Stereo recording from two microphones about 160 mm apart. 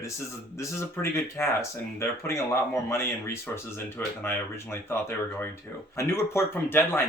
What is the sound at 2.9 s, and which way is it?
Speech, 15° left (ahead or behind).